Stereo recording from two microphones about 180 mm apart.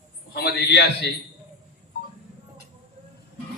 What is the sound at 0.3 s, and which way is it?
Speech, 65° left (ahead or behind).